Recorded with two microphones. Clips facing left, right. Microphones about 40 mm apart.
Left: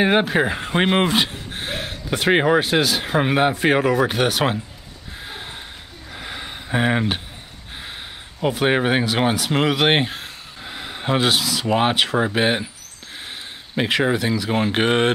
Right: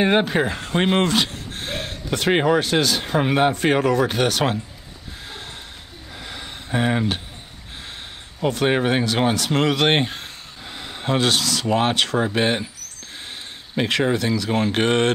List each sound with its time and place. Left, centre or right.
0.0 s speech: centre
6.1 s a sound: centre
8.4 s speech: centre
13.7 s speech: centre